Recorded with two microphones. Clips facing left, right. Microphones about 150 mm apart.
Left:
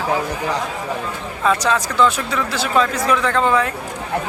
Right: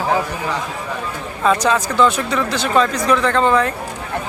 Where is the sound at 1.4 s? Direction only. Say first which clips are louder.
Right 2 dB; centre (ahead or behind).